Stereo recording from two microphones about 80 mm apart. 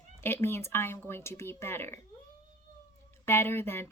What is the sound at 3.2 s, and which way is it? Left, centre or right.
Speech, left.